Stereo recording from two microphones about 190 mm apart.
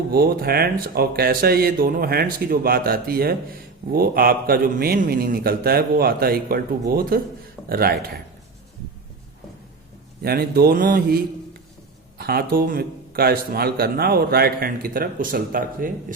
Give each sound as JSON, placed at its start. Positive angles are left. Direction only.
{"t": 0.1, "sound": "a man's voice", "side_deg": -50}
{"t": 10.2, "sound": "a man's voice", "side_deg": -55}